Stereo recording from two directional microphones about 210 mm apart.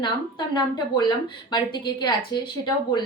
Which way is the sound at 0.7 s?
20° left (ahead or behind).